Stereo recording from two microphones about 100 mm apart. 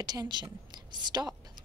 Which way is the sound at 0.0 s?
45° right (ahead or behind).